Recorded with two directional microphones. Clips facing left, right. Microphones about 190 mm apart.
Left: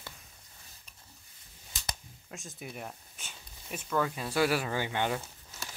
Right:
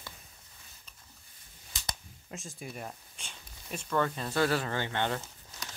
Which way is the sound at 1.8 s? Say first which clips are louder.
Even; centre (ahead or behind).